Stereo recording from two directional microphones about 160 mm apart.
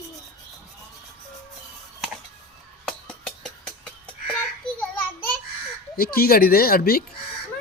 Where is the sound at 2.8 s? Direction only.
5° left (ahead or behind).